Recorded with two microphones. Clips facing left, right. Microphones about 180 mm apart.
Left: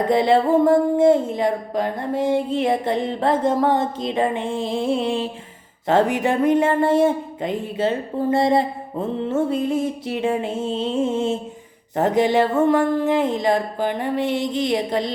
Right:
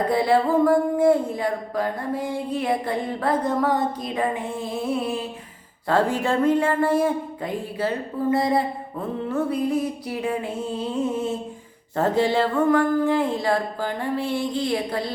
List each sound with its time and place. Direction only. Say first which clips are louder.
0.1 s speech: left 5 dB; 25° left (ahead or behind)